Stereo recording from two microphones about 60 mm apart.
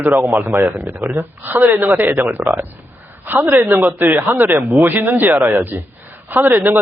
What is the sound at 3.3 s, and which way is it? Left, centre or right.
A man's voice, right.